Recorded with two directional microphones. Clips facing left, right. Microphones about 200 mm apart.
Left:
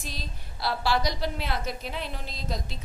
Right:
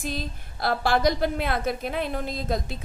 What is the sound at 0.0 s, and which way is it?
A woman's voice, 50° right (ahead or behind).